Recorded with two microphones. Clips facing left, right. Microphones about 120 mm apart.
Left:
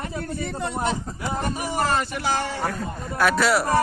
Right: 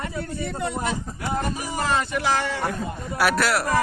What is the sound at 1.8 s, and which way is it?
Speech, 40° left (ahead or behind).